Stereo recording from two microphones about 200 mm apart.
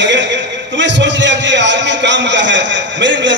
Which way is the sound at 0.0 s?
65° right (ahead or behind).